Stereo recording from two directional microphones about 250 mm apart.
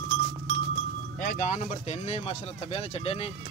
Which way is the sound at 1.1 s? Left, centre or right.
Left.